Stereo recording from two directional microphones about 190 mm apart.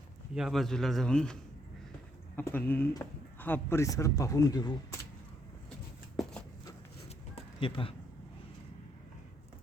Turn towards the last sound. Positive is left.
turn(degrees=30)  # may be behind; listen again after turning